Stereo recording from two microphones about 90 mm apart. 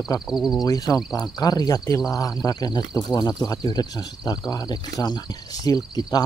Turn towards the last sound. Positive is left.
turn(degrees=45)  # may be behind; listen again after turning